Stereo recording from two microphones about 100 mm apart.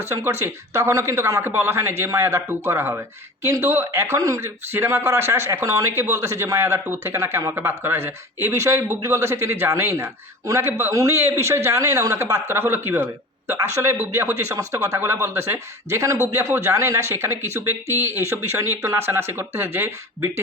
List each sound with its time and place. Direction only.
0.0 s speech: 25° right (ahead or behind)